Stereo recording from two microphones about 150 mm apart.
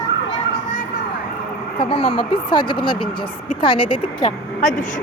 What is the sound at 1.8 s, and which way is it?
Speech, 40° left (ahead or behind).